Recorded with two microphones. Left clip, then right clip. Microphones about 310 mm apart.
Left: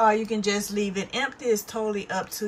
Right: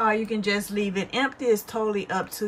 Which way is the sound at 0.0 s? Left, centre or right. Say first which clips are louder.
Left 2 dB; centre.